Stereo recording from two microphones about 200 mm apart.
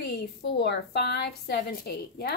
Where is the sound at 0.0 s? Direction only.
55° left (ahead or behind).